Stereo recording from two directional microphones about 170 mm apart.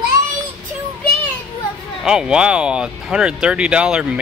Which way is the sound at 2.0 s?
5° right (ahead or behind).